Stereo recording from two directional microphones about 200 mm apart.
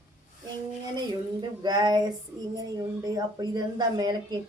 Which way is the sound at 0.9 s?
20° right (ahead or behind).